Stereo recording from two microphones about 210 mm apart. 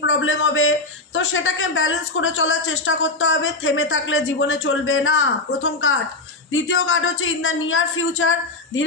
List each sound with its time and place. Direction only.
0.0 s a man's voice: 65° left (ahead or behind)
6.5 s a man's voice: 70° left (ahead or behind)